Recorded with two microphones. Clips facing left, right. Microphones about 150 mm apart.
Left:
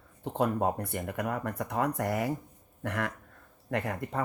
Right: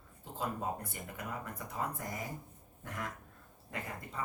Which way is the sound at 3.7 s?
65° left (ahead or behind).